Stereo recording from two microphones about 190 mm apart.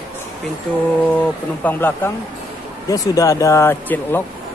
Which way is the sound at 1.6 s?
10° left (ahead or behind).